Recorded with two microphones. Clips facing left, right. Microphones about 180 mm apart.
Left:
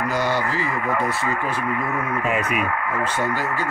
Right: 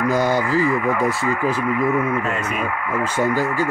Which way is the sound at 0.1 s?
45° right (ahead or behind).